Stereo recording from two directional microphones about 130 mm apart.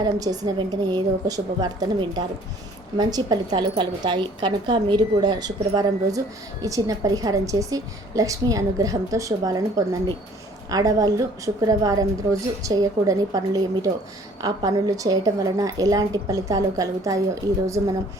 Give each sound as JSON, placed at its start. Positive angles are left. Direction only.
{"t": 0.0, "sound": "a woman's voice", "side_deg": -30}